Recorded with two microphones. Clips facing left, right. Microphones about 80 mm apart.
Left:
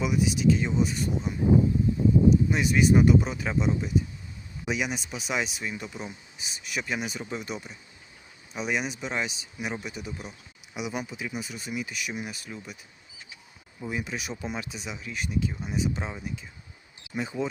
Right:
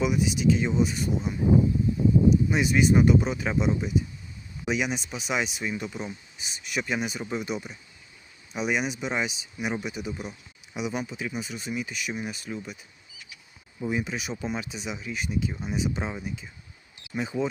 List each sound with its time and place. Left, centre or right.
0.0 s speech: centre
10.8 s speech: centre
13.7 s speech: centre